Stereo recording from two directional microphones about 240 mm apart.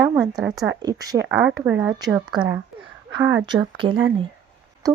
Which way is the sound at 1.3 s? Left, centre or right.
Centre.